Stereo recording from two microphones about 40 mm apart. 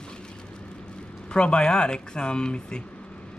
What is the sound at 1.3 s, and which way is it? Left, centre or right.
Speech, left.